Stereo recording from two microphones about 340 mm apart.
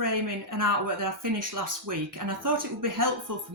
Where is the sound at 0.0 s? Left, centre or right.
Right.